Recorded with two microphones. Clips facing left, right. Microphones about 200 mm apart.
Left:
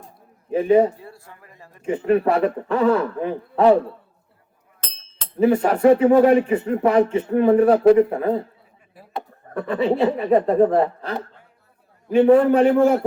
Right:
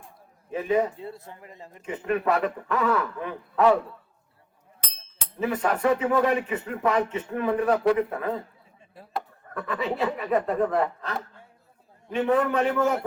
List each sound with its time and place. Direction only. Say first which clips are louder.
0.5 s speech: left 8 dB; 30° left (ahead or behind)
0.9 s speech: right 4 dB; 20° right (ahead or behind)
1.8 s speech: left 8 dB; 30° left (ahead or behind)
5.4 s speech: left 8 dB; 30° left (ahead or behind)
9.5 s speech: left 9 dB; 30° left (ahead or behind)